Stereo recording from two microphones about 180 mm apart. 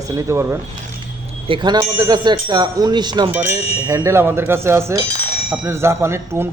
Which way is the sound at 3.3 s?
10° right (ahead or behind).